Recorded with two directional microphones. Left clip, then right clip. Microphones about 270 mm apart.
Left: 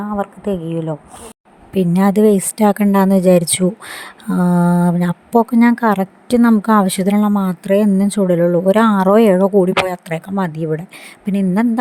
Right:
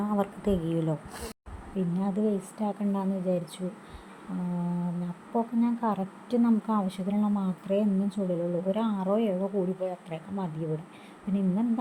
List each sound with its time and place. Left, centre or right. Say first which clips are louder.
0.0 s a woman's voice: left 8 dB; centre
1.7 s speech: left 17 dB; left